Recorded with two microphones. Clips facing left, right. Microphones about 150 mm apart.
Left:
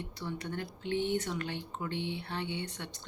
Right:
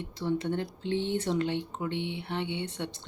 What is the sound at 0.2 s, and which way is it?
Speech, 25° right (ahead or behind).